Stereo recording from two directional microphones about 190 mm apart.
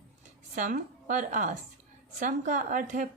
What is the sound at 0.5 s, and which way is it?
A woman's voice, 40° right (ahead or behind).